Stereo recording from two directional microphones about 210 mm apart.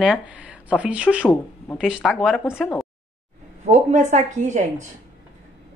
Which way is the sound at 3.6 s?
35° right (ahead or behind).